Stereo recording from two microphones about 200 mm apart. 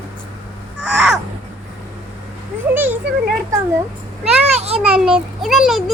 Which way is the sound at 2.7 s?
10° right (ahead or behind).